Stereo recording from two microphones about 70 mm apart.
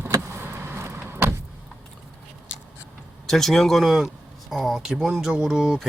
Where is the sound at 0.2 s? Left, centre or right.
Right.